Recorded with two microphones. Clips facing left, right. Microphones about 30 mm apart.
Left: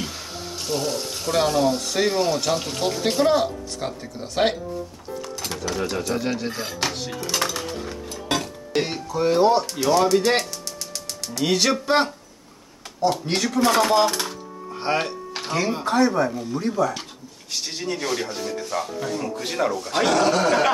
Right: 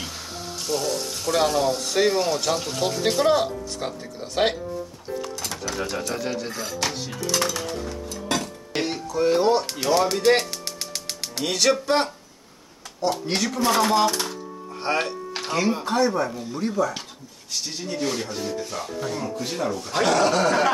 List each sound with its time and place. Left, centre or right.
0.7 s speech: centre
5.7 s speech: centre
7.3 s dishes: centre
11.4 s speech: centre
17.5 s speech: left
17.9 s speech: centre
19.3 s speech: left
19.9 s speech: centre